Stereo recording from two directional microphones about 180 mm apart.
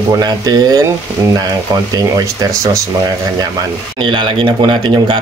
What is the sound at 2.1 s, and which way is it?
Speech, 20° right (ahead or behind).